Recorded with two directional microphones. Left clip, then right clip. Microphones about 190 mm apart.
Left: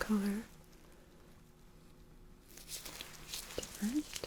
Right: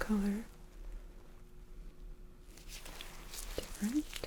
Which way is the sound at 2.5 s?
20° left (ahead or behind).